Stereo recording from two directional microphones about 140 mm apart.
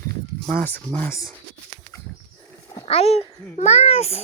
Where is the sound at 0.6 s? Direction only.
15° left (ahead or behind).